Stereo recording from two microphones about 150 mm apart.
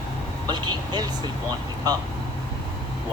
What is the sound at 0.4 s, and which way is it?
Speech, 30° right (ahead or behind).